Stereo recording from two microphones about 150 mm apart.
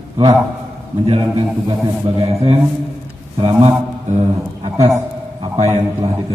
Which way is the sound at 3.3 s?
45° right (ahead or behind).